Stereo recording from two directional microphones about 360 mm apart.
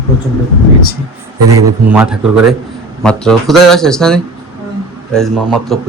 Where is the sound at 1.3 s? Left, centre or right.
Right.